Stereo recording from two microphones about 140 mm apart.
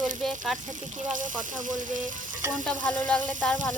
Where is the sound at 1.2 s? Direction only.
65° right (ahead or behind).